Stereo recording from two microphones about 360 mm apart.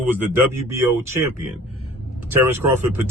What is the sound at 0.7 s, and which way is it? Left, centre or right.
Speech, centre.